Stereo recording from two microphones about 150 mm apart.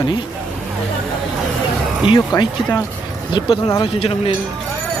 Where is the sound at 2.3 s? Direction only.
30° left (ahead or behind).